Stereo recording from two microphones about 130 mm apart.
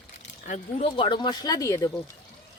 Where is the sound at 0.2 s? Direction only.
65° left (ahead or behind).